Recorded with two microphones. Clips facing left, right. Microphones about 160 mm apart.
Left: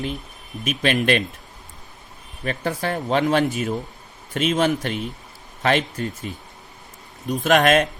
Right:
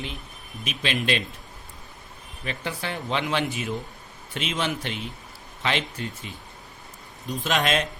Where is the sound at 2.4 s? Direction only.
45° left (ahead or behind).